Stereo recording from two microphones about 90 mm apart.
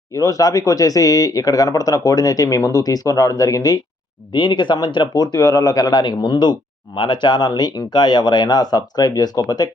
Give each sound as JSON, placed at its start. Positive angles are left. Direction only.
{"t": 0.1, "sound": "speech", "side_deg": 40}
{"t": 4.3, "sound": "speech", "side_deg": 60}